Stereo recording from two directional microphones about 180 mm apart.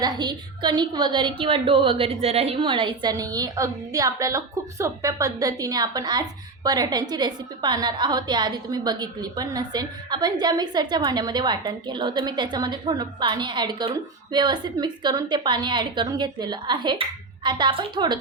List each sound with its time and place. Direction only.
0.0 s a woman's voice: 25° right (ahead or behind)